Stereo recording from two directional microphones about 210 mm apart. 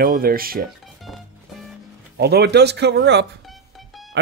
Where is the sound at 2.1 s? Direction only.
50° right (ahead or behind).